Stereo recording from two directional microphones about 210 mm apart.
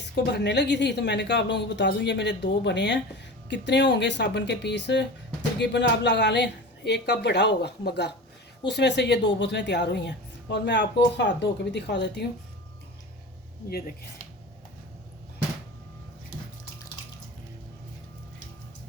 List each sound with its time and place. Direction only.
0.3 s speech: 55° left (ahead or behind)
13.7 s speech: 45° left (ahead or behind)